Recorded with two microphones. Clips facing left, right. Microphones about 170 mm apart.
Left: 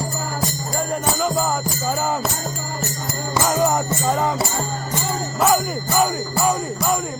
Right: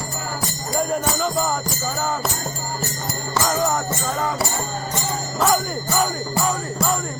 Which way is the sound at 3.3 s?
15° left (ahead or behind).